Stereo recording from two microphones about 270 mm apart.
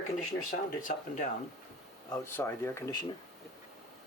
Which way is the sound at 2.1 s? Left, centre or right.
Centre.